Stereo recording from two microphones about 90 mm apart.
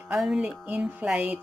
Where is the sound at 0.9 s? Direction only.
15° right (ahead or behind).